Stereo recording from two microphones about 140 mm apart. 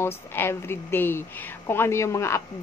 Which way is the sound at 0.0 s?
15° left (ahead or behind).